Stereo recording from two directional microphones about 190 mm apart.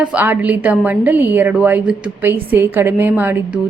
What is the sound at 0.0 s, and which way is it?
A woman's voice, 10° right (ahead or behind).